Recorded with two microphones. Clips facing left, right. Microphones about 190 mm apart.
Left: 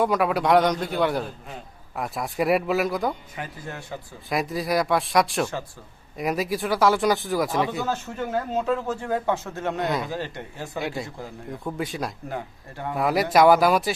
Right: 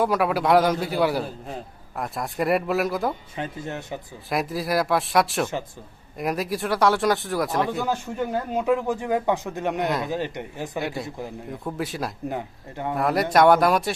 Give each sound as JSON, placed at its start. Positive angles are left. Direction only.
{"t": 0.0, "sound": "speech", "side_deg": 0}
{"t": 3.3, "sound": "speech", "side_deg": -25}
{"t": 4.3, "sound": "speech", "side_deg": 0}
{"t": 7.9, "sound": "speech", "side_deg": -15}
{"t": 10.8, "sound": "speech", "side_deg": 0}
{"t": 12.3, "sound": "speech", "side_deg": -20}
{"t": 12.9, "sound": "speech", "side_deg": 0}